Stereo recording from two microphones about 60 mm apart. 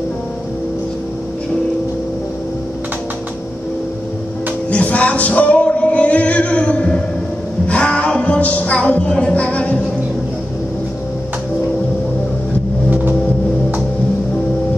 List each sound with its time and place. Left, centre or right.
4.6 s music: left
7.6 s speech: centre